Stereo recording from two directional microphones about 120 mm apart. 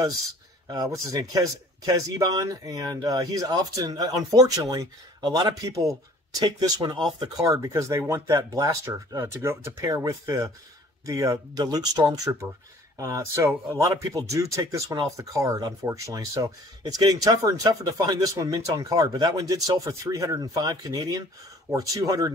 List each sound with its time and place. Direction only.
0.7 s speech: 30° right (ahead or behind)